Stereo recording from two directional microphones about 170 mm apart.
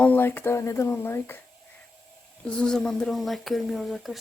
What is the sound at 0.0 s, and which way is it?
Speech, 10° left (ahead or behind).